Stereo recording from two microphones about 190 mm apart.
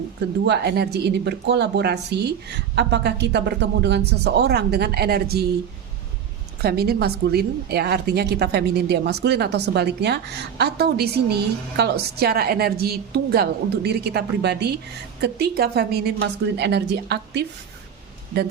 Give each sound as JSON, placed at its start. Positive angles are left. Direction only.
{"t": 0.4, "sound": "a woman's voice", "side_deg": -60}
{"t": 6.6, "sound": "a woman's voice", "side_deg": -55}